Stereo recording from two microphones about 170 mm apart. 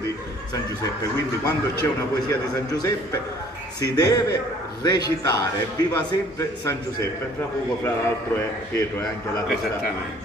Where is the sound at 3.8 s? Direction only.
20° left (ahead or behind).